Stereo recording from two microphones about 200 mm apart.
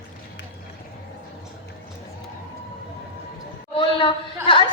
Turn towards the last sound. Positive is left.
turn(degrees=25)  # may be behind; listen again after turning